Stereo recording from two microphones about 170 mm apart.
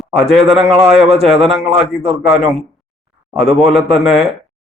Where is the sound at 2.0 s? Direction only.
35° right (ahead or behind).